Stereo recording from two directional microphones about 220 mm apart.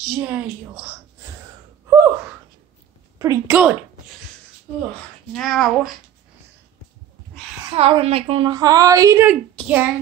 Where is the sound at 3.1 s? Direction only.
15° right (ahead or behind).